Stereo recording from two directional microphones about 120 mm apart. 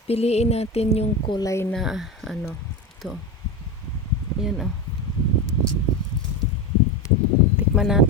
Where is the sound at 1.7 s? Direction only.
5° right (ahead or behind).